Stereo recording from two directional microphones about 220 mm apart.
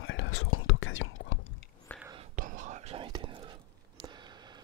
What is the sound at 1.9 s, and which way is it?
Whispering, 5° left (ahead or behind).